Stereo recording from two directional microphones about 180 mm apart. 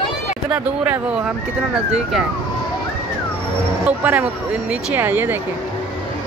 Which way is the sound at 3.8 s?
10° right (ahead or behind).